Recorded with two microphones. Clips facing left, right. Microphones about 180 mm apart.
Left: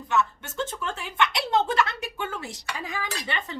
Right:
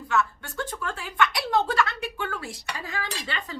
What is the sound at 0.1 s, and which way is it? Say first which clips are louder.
Speech: left 1 dB; 20° left (ahead or behind).